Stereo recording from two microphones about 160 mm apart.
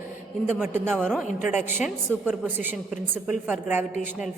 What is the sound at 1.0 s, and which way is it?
Speech, 5° left (ahead or behind).